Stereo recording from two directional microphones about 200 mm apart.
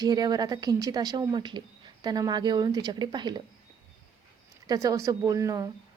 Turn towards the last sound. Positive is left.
turn(degrees=-15)  # may be behind; listen again after turning